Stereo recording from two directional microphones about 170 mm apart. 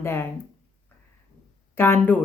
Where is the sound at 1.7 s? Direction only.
15° left (ahead or behind).